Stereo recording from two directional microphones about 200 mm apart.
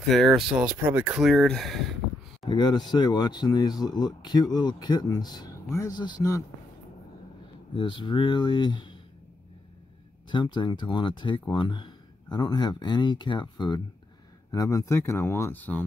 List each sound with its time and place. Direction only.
0.1 s speech: centre (ahead or behind)
2.4 s speech: 20° left (ahead or behind)
7.7 s speech: 25° left (ahead or behind)
10.3 s speech: 25° left (ahead or behind)